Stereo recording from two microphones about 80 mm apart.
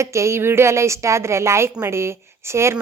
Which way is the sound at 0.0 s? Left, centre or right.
Right.